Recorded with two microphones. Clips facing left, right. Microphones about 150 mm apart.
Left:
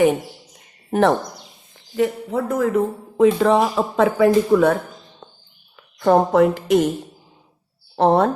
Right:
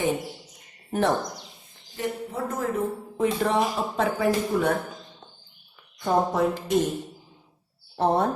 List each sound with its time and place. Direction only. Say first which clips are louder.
0.9 s speech: left 7 dB; 90° left
6.0 s speech: left 8 dB; 80° left
7.9 s speech: left 7 dB; 90° left